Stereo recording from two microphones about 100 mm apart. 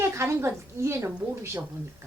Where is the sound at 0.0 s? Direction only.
25° right (ahead or behind).